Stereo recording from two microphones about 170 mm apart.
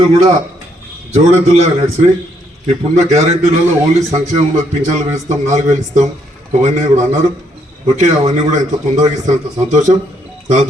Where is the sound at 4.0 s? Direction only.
40° right (ahead or behind).